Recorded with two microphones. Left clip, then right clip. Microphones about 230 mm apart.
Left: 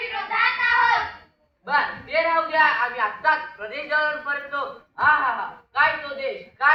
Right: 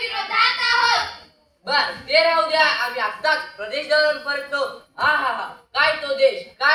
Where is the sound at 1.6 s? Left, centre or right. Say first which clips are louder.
Right 2 dB; right.